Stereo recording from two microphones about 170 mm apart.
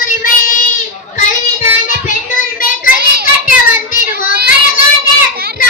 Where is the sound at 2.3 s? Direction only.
55° left (ahead or behind).